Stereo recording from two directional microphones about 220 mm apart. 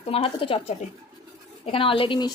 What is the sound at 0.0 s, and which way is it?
Speech, 25° left (ahead or behind).